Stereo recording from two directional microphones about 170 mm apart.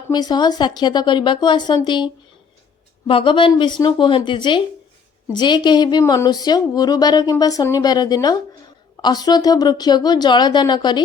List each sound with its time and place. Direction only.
0.1 s a woman's voice: 25° left (ahead or behind)
3.1 s a woman's voice: 30° left (ahead or behind)